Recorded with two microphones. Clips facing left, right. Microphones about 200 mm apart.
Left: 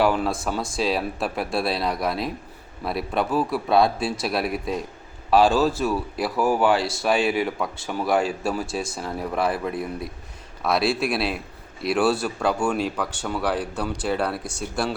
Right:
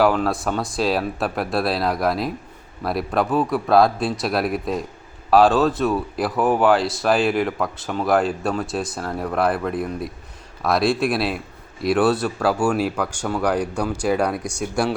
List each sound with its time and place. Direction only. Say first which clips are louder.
0.0 s a man's voice: right 3 dB; centre (ahead or behind)
13.3 s speech: right 4 dB; 5° left (ahead or behind)
13.9 s speech: right 5 dB; 10° right (ahead or behind)